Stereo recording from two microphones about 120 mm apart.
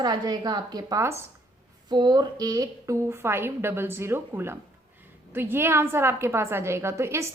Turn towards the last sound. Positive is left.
turn(degrees=-20)  # may be behind; listen again after turning